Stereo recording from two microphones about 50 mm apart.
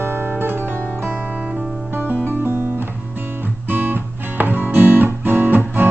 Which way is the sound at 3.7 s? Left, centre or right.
Right.